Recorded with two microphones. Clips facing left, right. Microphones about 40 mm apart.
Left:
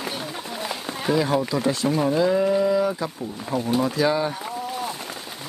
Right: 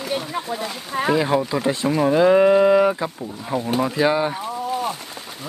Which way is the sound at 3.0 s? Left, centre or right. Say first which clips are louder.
Right 2 dB; right.